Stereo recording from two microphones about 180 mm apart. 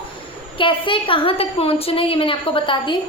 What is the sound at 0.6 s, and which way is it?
A woman's voice, 30° left (ahead or behind).